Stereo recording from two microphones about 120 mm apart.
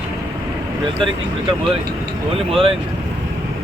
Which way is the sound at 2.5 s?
50° right (ahead or behind).